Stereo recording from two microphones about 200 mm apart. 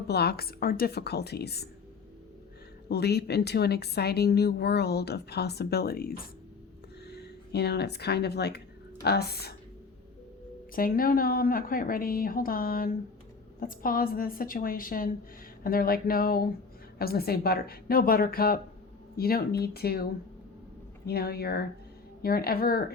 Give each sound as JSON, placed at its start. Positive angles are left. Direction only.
{"t": 0.1, "sound": "a woman's voice", "side_deg": 55}
{"t": 2.9, "sound": "a woman's voice", "side_deg": 55}
{"t": 10.8, "sound": "a woman's voice", "side_deg": 45}
{"t": 21.1, "sound": "a woman's voice", "side_deg": 50}